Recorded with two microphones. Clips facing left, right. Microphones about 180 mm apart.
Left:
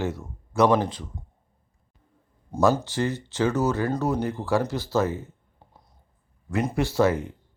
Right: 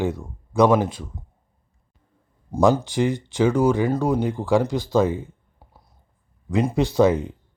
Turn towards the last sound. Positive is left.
turn(degrees=-15)  # may be behind; listen again after turning